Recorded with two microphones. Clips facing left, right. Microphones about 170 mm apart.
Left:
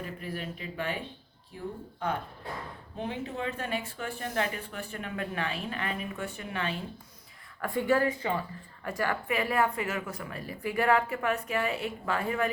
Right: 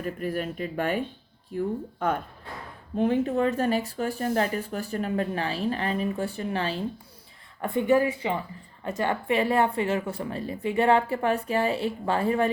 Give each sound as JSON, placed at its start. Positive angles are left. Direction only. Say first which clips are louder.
{"t": 0.0, "sound": "speech", "louder": "right 8 dB", "side_deg": -50}
{"t": 3.0, "sound": "speech", "louder": "right 11 dB", "side_deg": -50}
{"t": 7.6, "sound": "speech", "louder": "right 4 dB", "side_deg": -20}